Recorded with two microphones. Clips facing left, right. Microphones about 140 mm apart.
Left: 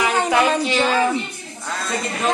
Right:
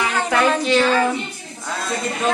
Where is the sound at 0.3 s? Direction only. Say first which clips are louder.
Right 1 dB; 5° left (ahead or behind).